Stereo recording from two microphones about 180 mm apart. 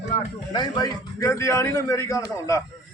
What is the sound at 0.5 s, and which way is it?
A man's voice, 20° left (ahead or behind).